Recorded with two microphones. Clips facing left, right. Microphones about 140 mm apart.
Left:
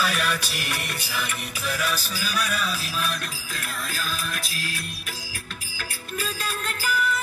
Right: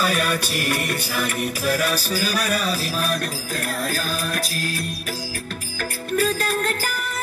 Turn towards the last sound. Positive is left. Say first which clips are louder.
# right 5 dB
turn(degrees=-50)  # may be behind; listen again after turning